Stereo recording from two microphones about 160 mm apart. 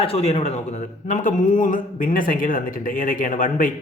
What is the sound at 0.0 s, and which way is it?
A man's voice, 40° left (ahead or behind).